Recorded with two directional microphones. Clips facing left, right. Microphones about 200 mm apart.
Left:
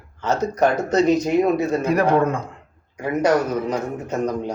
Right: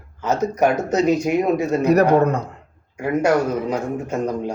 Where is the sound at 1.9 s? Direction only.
40° right (ahead or behind).